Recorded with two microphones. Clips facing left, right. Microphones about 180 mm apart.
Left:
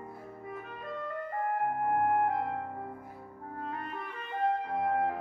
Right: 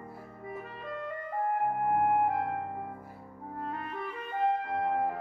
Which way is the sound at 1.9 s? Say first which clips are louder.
Right 1 dB; 5° right (ahead or behind).